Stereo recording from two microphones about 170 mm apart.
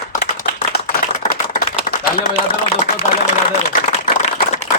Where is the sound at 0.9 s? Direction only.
50° left (ahead or behind).